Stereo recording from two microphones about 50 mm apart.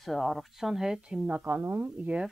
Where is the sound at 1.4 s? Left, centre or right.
Right.